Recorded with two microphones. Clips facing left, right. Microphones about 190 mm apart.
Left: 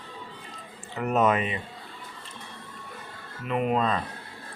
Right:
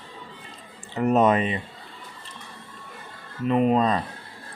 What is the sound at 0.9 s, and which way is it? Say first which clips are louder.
Speech: right 4 dB; 35° right (ahead or behind).